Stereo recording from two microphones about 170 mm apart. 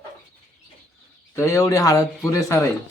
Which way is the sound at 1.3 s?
15° left (ahead or behind).